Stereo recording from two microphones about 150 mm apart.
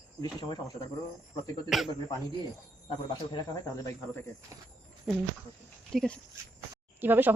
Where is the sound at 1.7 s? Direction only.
Centre (ahead or behind).